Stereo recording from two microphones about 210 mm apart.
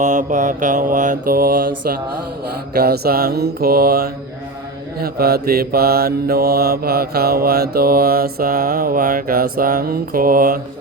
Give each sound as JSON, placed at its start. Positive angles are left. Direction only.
{"t": 0.0, "sound": "mantra", "side_deg": -35}